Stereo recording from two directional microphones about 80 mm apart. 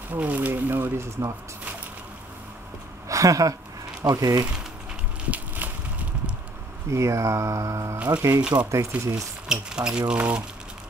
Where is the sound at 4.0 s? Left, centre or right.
Right.